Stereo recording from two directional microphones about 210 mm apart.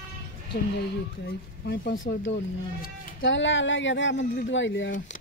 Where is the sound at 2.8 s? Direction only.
60° left (ahead or behind).